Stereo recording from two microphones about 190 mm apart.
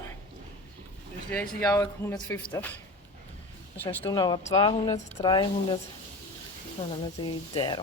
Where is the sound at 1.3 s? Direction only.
10° left (ahead or behind).